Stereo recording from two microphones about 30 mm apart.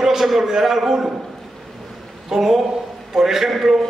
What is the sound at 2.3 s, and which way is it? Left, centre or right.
Speech, centre.